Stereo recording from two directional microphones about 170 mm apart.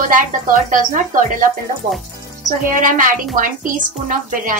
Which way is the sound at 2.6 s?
50° right (ahead or behind).